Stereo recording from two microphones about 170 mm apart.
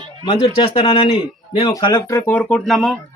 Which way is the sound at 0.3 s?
30° left (ahead or behind).